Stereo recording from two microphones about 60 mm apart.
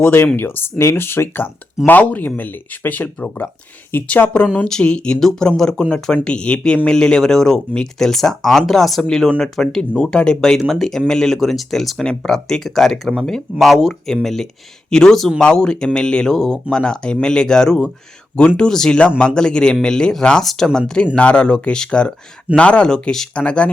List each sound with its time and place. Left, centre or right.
0.0 s speech: left
1.9 s speech: left
4.7 s speech: centre
20.4 s speech: centre
20.7 s speech: centre